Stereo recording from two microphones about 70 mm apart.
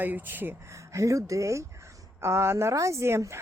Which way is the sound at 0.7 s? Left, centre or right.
Right.